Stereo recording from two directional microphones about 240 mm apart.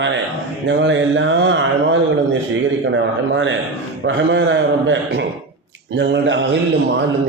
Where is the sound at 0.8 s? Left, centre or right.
Right.